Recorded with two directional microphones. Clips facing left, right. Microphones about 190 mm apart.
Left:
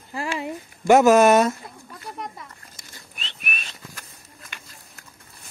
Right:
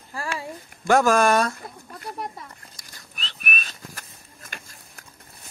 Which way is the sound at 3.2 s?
25° left (ahead or behind).